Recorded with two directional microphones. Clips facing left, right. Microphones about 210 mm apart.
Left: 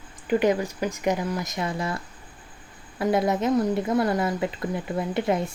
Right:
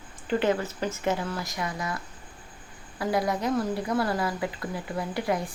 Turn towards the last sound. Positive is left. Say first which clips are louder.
# left 4 dB
turn(degrees=25)  # may be behind; listen again after turning